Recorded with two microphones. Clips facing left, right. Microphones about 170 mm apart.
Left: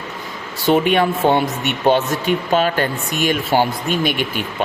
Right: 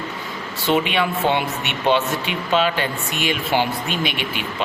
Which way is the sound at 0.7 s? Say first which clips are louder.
Left 5 dB; 45° left (ahead or behind).